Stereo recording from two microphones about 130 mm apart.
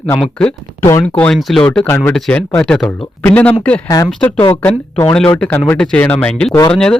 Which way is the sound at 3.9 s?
30° left (ahead or behind).